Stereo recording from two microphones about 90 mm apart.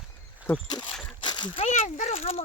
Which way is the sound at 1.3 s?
60° left (ahead or behind).